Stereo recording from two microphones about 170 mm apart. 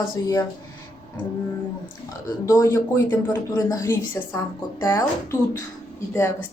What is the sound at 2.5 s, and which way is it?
Speech, 15° left (ahead or behind).